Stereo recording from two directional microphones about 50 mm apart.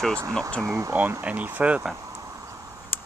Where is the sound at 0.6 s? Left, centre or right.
Right.